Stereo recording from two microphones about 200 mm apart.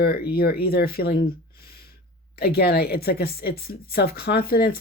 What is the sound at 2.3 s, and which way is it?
A woman's voice, 50° left (ahead or behind).